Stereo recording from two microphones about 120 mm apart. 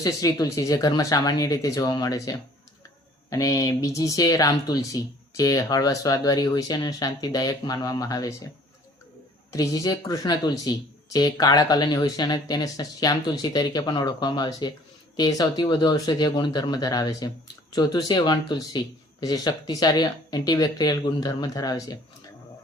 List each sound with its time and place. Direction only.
0.0 s speech: 30° left (ahead or behind)
9.5 s speech: 30° left (ahead or behind)